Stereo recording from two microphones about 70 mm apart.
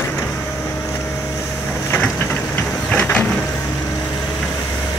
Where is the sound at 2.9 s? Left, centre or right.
Centre.